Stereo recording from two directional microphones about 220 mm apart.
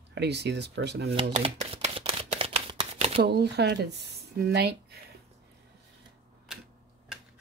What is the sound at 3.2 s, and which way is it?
Speech, 50° right (ahead or behind).